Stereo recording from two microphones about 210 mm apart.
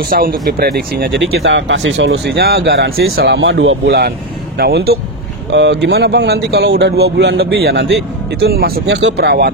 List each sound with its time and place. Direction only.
0.1 s speech: 45° right (ahead or behind)